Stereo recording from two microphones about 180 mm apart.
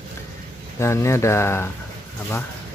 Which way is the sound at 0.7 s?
15° left (ahead or behind).